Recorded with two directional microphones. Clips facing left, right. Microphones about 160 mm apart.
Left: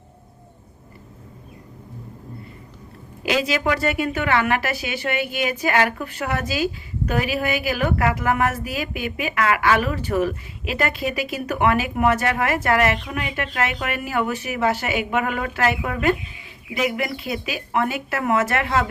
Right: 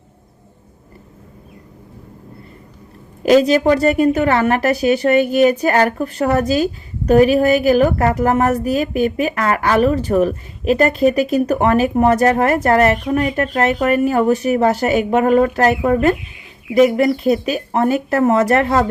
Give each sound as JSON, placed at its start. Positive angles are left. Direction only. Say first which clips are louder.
{"t": 3.2, "sound": "a woman's voice", "louder": "right 10 dB", "side_deg": -40}